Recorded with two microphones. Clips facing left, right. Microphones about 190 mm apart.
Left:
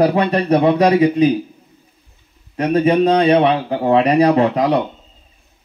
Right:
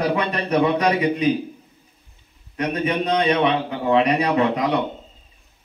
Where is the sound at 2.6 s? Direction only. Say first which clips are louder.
Left 9 dB; 30° left (ahead or behind).